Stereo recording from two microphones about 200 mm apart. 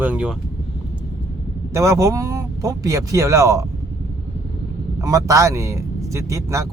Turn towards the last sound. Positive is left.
turn(degrees=-15)  # may be behind; listen again after turning